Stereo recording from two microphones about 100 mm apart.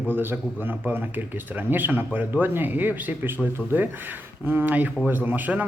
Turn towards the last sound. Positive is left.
turn(degrees=-15)  # may be behind; listen again after turning